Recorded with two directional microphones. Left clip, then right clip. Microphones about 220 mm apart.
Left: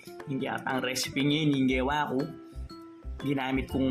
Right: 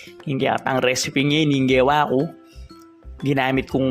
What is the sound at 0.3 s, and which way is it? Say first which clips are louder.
Speech: right 11 dB; 40° right (ahead or behind).